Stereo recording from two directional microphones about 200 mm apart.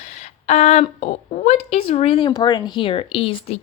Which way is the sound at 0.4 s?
35° left (ahead or behind).